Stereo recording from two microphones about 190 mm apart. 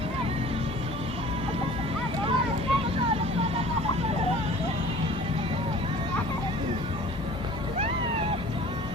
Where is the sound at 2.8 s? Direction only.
30° right (ahead or behind).